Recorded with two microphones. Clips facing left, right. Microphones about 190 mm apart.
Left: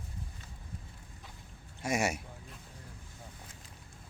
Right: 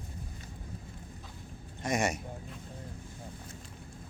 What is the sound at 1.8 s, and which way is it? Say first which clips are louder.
Speech: right 1 dB; 10° left (ahead or behind).